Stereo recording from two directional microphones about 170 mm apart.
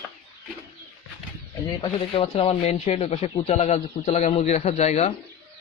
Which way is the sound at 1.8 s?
35° left (ahead or behind).